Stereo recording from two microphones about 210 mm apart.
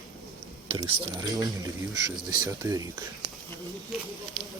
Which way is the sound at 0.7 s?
20° right (ahead or behind).